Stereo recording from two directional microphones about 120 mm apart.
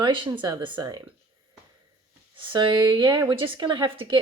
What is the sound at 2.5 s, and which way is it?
A woman's voice, 40° right (ahead or behind).